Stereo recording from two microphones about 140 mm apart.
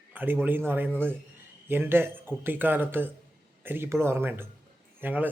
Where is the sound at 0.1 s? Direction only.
10° right (ahead or behind).